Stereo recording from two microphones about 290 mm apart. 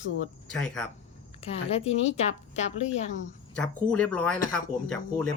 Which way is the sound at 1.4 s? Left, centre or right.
Left.